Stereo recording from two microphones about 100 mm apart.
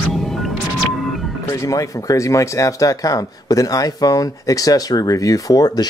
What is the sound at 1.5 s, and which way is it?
Speech, 35° left (ahead or behind).